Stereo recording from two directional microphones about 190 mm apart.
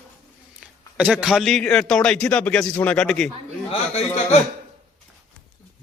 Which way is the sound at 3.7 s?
35° left (ahead or behind).